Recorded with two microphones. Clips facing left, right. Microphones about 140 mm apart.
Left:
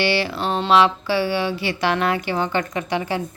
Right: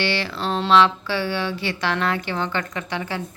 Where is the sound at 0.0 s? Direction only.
10° left (ahead or behind).